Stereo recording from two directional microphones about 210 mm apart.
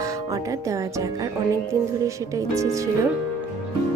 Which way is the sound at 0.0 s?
15° right (ahead or behind).